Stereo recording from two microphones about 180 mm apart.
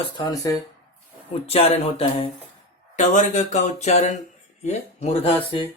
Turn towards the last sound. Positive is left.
turn(degrees=35)  # may be behind; listen again after turning